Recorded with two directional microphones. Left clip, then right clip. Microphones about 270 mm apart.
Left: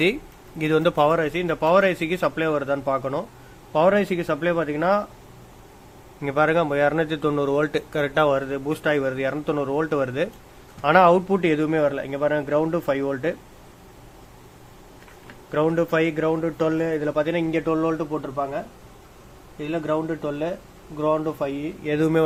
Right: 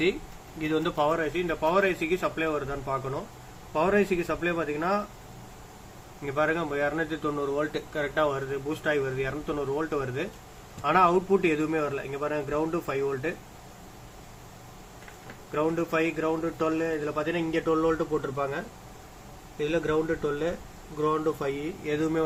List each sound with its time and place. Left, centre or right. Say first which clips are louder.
0.6 s speech: left 7 dB; left
6.2 s speech: left 7 dB; left
15.5 s speech: left 6 dB; left
17.7 s speech: even; centre
19.7 s speech: left 3 dB; centre